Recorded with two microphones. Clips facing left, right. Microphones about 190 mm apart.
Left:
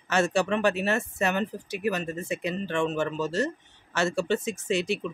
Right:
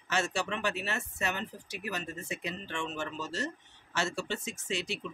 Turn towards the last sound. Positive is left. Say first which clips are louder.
# left 9 dB
turn(degrees=55)  # may be behind; listen again after turning